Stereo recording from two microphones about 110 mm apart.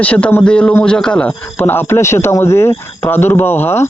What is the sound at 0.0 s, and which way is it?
A man's voice, 15° left (ahead or behind).